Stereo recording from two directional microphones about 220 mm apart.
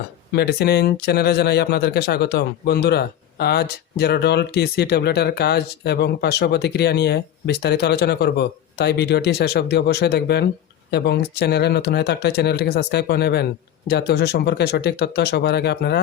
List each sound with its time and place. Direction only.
0.3 s speech: 45° left (ahead or behind)